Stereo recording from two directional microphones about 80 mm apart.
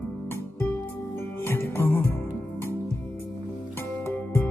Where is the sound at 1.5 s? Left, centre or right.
Left.